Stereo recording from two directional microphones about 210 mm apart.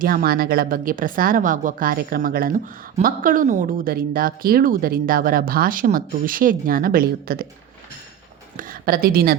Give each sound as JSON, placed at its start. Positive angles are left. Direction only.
{"t": 0.0, "sound": "speech", "side_deg": -45}
{"t": 8.5, "sound": "a woman's voice", "side_deg": -45}